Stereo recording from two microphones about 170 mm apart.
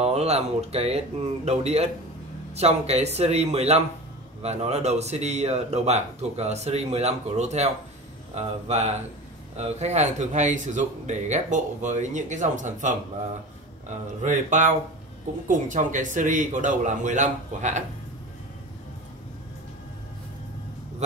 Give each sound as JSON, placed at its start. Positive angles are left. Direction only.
{"t": 0.0, "sound": "speech", "side_deg": -40}
{"t": 14.2, "sound": "speech", "side_deg": -45}